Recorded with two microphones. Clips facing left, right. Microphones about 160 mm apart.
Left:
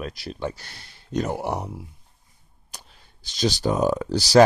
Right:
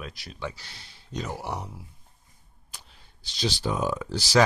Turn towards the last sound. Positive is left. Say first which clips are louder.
# left 6 dB
turn(degrees=40)  # may be behind; listen again after turning